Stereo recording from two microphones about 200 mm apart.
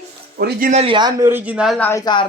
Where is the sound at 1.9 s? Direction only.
20° left (ahead or behind).